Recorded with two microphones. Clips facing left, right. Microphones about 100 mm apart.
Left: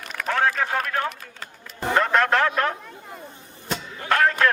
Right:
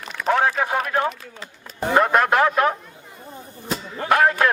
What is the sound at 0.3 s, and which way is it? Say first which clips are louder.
A man's voice: right 3 dB; 20° right (ahead or behind).